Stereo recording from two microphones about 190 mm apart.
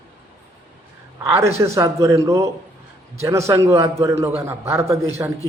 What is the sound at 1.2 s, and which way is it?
A man's voice, 15° right (ahead or behind).